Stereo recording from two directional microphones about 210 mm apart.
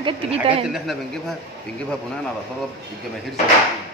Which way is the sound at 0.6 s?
Centre (ahead or behind).